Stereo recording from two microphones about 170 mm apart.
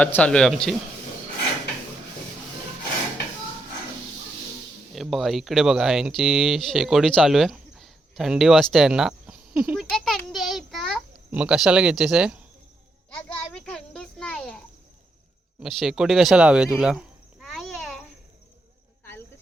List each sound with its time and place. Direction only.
0.0 s speech: 10° left (ahead or behind)
4.9 s speech: centre (ahead or behind)
13.2 s children playing: 5° left (ahead or behind)
15.6 s speech: centre (ahead or behind)